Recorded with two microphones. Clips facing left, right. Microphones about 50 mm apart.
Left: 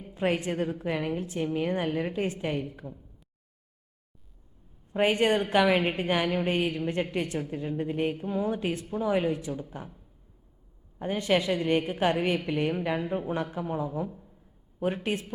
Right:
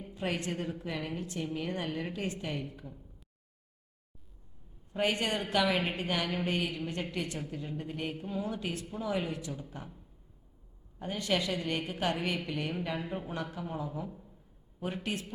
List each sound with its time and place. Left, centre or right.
0.1 s a sound: left
0.3 s a woman's voice: centre
1.5 s a woman's voice: left
4.9 s a woman's voice: left
11.0 s a woman's voice: left; by 14.3 s centre
15.0 s a woman's voice: left